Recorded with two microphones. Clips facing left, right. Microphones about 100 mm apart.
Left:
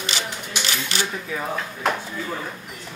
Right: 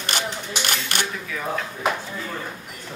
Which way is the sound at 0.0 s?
55° right (ahead or behind).